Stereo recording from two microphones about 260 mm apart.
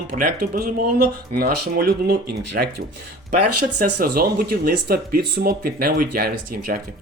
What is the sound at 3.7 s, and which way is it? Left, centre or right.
Speech, right.